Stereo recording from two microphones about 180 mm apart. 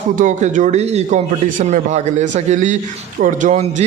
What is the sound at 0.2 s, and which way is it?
A man's voice, 40° right (ahead or behind).